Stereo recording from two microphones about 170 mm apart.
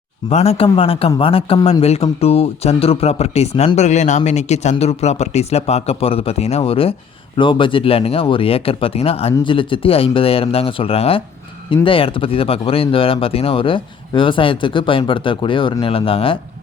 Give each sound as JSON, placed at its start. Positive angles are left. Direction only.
{"t": 0.3, "sound": "speech", "side_deg": 40}